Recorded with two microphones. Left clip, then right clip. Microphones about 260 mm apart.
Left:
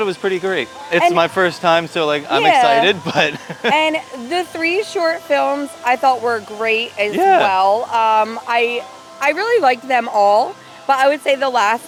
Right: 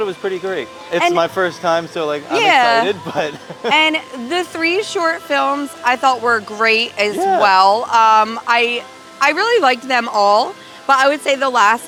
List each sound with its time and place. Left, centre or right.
0.0 s speech: left
2.4 s speech: right
2.8 s speech: left
3.7 s a woman's voice: right
7.2 s speech: left
7.4 s speech: right